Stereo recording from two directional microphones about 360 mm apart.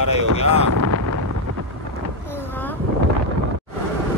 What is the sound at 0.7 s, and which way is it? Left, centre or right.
Speech, right.